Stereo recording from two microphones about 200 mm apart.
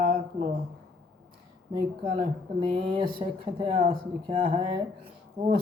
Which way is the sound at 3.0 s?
25° right (ahead or behind).